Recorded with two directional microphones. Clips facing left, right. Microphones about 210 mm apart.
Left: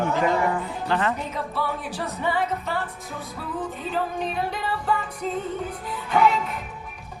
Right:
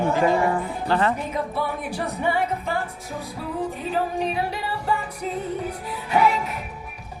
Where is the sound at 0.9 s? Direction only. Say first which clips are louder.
Right 3 dB; 35° right (ahead or behind).